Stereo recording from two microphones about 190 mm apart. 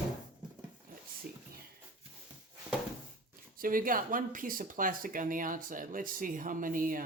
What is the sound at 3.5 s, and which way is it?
Speech, 45° right (ahead or behind).